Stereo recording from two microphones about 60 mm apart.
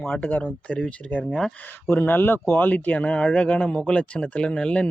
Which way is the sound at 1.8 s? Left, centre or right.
Left.